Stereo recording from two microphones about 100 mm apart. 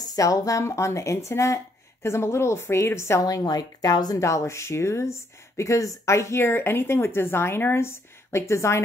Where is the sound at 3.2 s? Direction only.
40° left (ahead or behind).